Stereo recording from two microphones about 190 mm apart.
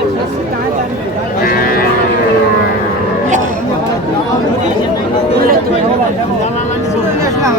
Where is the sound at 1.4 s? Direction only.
50° left (ahead or behind).